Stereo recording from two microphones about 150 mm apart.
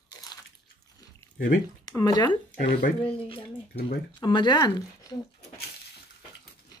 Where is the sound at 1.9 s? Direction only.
25° left (ahead or behind).